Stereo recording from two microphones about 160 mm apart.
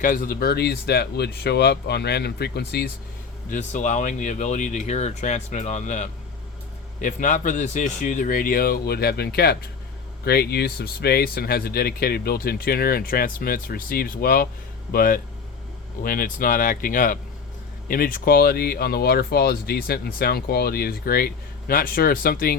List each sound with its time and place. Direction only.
0.0 s speech: 55° left (ahead or behind); by 2.9 s 80° left
3.5 s speech: 50° left (ahead or behind); by 22.5 s 65° left (ahead or behind)